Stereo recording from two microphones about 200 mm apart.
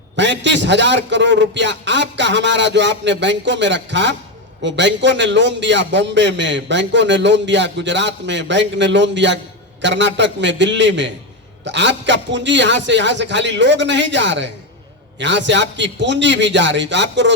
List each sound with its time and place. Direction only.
0.2 s a man's voice: 65° right (ahead or behind)